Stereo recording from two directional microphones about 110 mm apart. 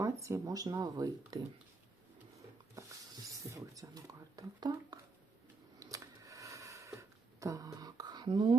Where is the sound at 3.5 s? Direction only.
30° right (ahead or behind).